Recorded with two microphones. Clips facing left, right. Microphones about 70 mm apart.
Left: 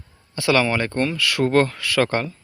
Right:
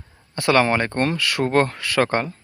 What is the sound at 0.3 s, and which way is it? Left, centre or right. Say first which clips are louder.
Speech: right 1 dB; right.